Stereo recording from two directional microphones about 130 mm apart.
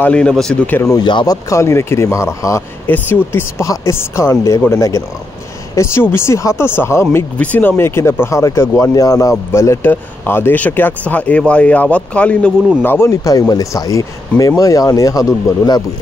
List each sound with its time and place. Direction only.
0.0 s speech: 10° left (ahead or behind)
0.8 s speech: 35° left (ahead or behind)